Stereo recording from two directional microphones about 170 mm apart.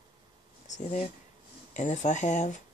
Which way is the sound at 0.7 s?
40° left (ahead or behind).